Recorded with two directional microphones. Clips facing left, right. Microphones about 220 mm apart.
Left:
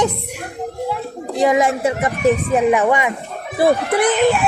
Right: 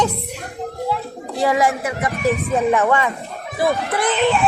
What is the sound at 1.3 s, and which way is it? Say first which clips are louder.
Speech: left 3 dB; 20° left (ahead or behind).